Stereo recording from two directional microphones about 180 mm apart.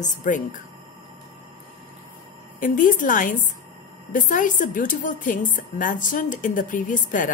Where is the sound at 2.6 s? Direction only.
50° left (ahead or behind).